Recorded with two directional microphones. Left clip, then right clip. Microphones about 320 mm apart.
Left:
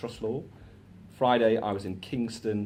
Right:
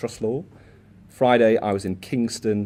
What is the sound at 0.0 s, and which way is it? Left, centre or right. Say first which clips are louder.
Speech: right 7 dB; right.